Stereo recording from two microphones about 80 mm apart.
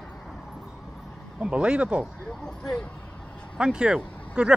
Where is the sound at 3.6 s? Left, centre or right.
Centre.